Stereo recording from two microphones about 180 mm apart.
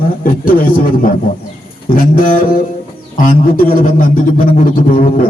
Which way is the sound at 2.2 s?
50° left (ahead or behind).